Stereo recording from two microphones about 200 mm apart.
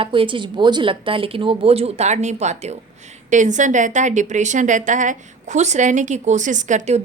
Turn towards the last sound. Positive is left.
turn(degrees=-35)  # may be behind; listen again after turning